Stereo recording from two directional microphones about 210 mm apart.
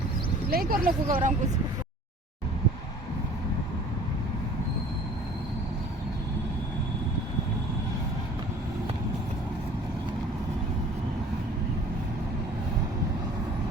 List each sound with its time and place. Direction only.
0.5 s speech: 45° right (ahead or behind)